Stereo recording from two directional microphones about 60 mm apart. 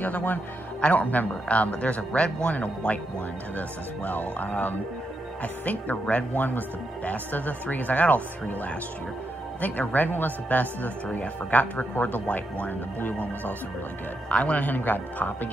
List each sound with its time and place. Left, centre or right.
0.0 s a man's voice: left
9.6 s a man's voice: left